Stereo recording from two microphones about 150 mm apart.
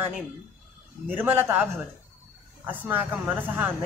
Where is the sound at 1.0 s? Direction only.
15° right (ahead or behind).